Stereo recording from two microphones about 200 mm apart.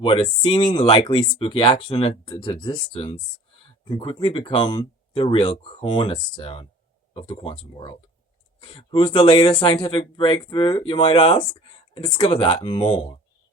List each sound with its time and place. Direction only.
0.0 s speech: 25° left (ahead or behind)